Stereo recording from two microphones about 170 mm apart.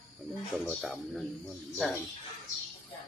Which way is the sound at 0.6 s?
Centre (ahead or behind).